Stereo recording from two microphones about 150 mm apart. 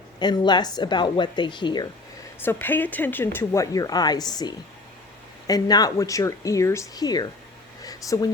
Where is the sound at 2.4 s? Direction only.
15° left (ahead or behind).